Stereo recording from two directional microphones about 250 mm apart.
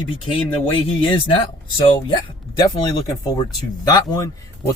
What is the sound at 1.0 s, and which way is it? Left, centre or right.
Speech, left.